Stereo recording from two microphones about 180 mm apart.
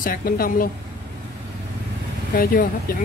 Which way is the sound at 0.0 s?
55° left (ahead or behind).